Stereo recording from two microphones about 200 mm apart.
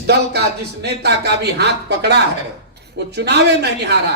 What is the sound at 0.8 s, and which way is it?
Speech, 55° right (ahead or behind).